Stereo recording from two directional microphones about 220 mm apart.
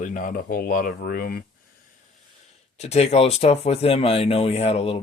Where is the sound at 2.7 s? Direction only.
30° left (ahead or behind).